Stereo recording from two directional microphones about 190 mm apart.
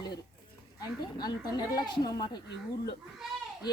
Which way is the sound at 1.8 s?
20° left (ahead or behind).